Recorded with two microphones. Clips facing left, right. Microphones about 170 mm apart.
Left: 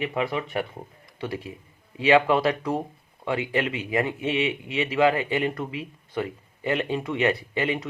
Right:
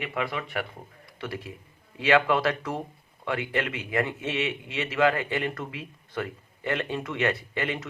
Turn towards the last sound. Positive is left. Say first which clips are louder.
# left 4 dB
turn(degrees=20)  # may be behind; listen again after turning